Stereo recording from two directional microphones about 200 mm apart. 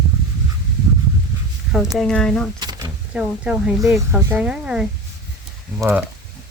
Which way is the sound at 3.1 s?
5° right (ahead or behind).